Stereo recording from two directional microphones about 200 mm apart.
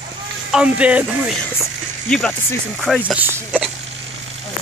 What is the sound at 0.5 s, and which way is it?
Speech, 5° right (ahead or behind).